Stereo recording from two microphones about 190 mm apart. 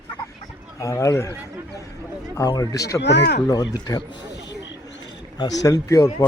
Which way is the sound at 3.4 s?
20° left (ahead or behind).